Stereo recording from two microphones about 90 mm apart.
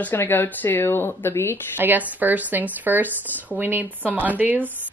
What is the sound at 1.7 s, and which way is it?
Speech, 20° right (ahead or behind).